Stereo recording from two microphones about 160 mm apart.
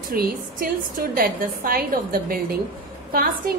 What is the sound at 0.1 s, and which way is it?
A woman's voice, 65° right (ahead or behind).